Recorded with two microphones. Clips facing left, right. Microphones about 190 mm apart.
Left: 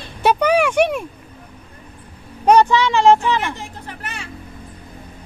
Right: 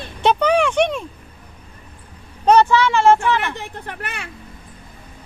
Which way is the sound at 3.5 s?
65° right (ahead or behind).